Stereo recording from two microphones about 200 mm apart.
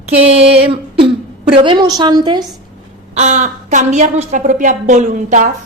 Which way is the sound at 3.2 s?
35° right (ahead or behind).